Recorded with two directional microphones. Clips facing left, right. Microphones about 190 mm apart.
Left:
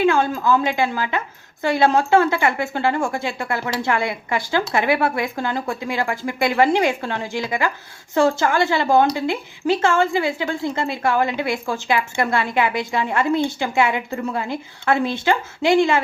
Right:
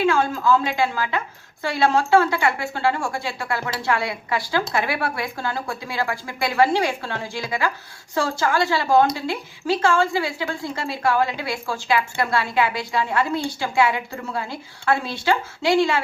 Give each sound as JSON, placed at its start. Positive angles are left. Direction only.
{"t": 0.0, "sound": "a woman's voice", "side_deg": 20}